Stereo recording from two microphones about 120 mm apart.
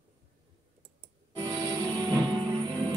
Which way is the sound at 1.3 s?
30° right (ahead or behind).